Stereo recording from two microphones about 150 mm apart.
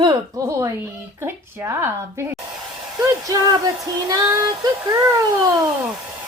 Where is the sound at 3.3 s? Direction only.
25° right (ahead or behind).